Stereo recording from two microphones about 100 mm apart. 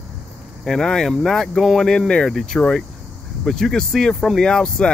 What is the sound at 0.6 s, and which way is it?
Speech, 5° left (ahead or behind).